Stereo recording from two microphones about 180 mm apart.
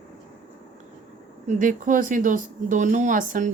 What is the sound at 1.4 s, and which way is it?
Speech, 45° right (ahead or behind).